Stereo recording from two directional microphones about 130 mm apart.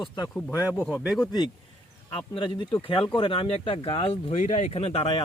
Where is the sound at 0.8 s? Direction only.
10° left (ahead or behind).